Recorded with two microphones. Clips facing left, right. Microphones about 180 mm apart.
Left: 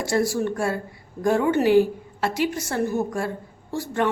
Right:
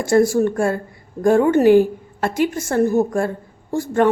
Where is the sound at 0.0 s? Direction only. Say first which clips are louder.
Right 7 dB; 50° right (ahead or behind).